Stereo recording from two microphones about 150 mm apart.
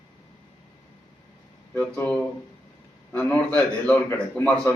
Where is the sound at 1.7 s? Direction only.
15° left (ahead or behind).